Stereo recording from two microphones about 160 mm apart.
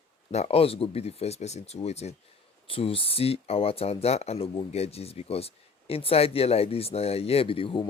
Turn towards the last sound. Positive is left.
turn(degrees=35)  # may be behind; listen again after turning